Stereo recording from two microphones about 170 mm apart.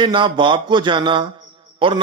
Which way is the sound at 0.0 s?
30° right (ahead or behind).